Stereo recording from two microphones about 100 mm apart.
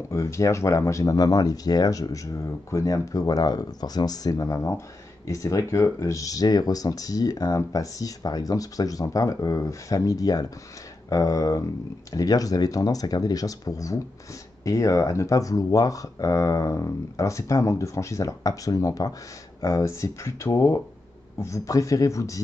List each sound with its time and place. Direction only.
0.1 s speech: 30° left (ahead or behind)